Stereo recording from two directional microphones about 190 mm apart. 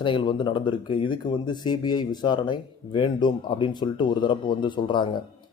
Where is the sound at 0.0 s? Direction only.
25° left (ahead or behind).